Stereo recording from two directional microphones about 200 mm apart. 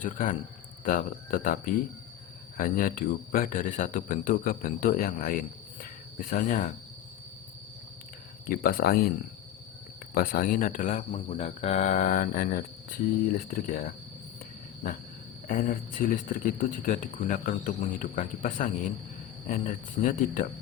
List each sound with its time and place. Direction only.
0.0 s speech: 40° left (ahead or behind)
8.4 s speech: 50° left (ahead or behind)
10.2 s speech: 45° left (ahead or behind)
15.4 s speech: 45° left (ahead or behind)